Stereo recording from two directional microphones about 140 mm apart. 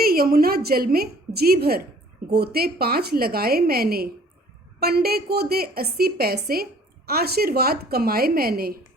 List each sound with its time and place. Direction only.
0.0 s a woman's voice: 90° right